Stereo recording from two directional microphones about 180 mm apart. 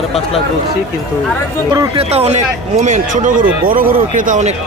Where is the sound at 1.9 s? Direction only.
35° right (ahead or behind).